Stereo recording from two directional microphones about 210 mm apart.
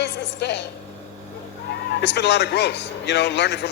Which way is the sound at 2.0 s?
55° left (ahead or behind).